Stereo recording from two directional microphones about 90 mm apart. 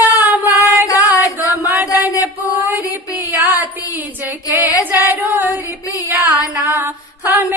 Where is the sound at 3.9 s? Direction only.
20° right (ahead or behind).